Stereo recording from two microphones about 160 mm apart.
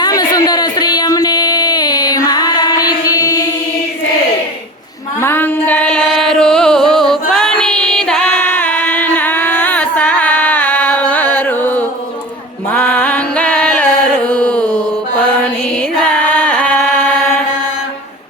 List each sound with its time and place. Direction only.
0.0 s a sound: 25° left (ahead or behind)
5.2 s music: 15° left (ahead or behind)
12.7 s carnatic music: 10° left (ahead or behind)
16.2 s chant: 5° left (ahead or behind)